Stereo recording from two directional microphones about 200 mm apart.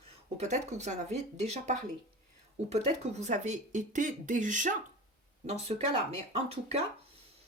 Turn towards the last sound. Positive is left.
turn(degrees=-35)  # may be behind; listen again after turning